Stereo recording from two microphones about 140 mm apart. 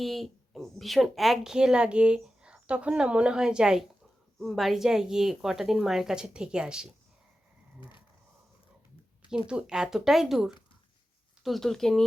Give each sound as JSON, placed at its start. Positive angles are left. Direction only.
{"t": 0.0, "sound": "a woman's voice", "side_deg": 0}
{"t": 7.8, "sound": "a sound", "side_deg": 35}
{"t": 9.5, "sound": "a woman's voice", "side_deg": -5}